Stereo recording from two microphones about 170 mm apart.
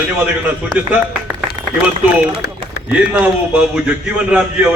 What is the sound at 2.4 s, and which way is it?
Run, 65° left (ahead or behind).